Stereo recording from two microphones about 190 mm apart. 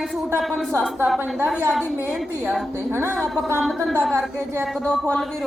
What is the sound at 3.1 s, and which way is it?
A man's voice, centre (ahead or behind).